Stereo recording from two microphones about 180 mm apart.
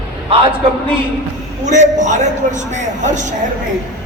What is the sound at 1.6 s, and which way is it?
A man's voice, 40° right (ahead or behind).